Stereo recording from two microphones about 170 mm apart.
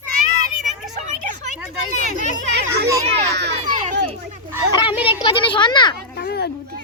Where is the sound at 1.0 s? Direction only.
45° right (ahead or behind).